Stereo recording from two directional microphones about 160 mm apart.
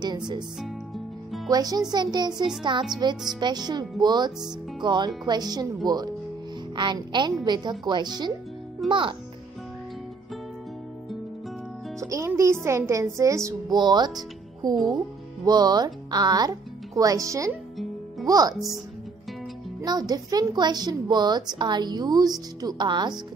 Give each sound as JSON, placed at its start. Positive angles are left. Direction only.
{"t": 0.6, "sound": "music", "side_deg": 0}
{"t": 1.5, "sound": "a woman's voice", "side_deg": -25}
{"t": 6.7, "sound": "a woman's voice", "side_deg": -30}
{"t": 12.0, "sound": "a woman's voice", "side_deg": -20}
{"t": 19.8, "sound": "a woman's voice", "side_deg": -25}